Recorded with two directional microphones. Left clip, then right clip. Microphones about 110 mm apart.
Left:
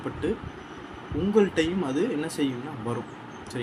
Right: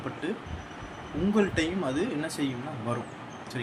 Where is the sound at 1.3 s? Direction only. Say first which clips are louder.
Left 5 dB; 15° left (ahead or behind).